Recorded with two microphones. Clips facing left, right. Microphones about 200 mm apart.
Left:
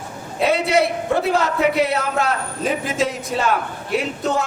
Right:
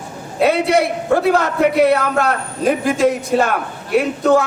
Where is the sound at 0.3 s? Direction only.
55° right (ahead or behind).